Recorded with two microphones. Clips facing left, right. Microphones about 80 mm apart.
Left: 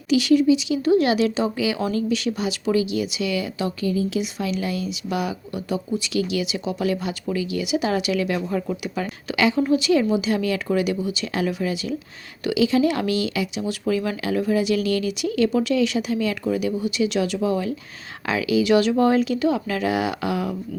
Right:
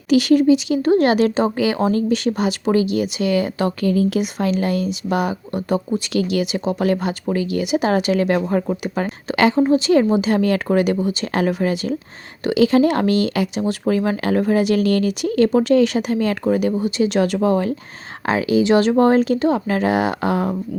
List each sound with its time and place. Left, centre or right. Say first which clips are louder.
0.1 s speech: right 3 dB; right
9.6 s speech: right 4 dB; right